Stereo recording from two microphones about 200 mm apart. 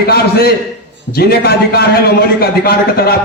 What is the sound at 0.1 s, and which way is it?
A man's voice, 50° left (ahead or behind).